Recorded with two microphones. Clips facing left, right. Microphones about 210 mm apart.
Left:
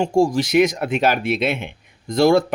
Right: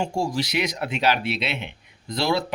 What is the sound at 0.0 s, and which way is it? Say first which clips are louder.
A man's voice: left 8 dB; 50° left (ahead or behind).